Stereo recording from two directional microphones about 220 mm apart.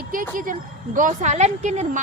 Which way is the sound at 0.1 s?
40° right (ahead or behind).